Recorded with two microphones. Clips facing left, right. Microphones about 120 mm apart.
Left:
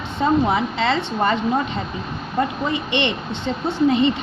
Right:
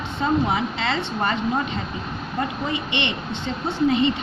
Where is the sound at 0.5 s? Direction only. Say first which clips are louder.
Left 4 dB; 35° left (ahead or behind).